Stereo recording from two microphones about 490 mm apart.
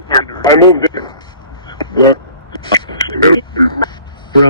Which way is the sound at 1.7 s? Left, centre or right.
Centre.